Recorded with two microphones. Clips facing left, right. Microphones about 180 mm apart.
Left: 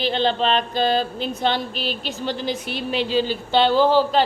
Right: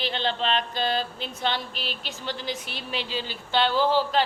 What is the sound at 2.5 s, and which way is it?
Speech, 15° left (ahead or behind).